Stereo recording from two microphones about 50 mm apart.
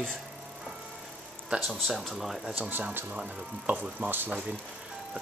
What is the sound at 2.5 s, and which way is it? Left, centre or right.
Speech, right.